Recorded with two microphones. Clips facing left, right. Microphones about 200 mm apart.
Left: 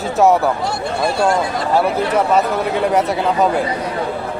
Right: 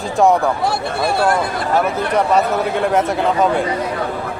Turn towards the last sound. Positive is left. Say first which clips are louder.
# even
turn(degrees=0)  # may be behind; listen again after turning